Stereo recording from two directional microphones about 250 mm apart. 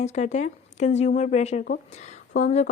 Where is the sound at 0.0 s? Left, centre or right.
Left.